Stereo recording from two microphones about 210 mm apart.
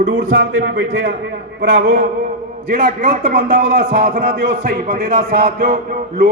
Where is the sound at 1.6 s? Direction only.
70° right (ahead or behind).